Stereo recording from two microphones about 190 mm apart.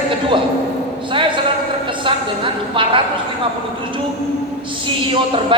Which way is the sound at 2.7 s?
25° right (ahead or behind).